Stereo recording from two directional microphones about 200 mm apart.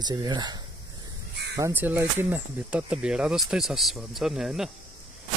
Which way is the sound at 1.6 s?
10° right (ahead or behind).